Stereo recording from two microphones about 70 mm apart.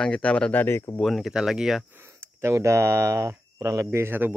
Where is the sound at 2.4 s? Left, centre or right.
Right.